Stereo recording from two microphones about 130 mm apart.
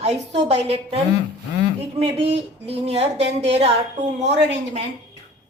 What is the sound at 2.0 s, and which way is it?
A woman's voice, 50° right (ahead or behind).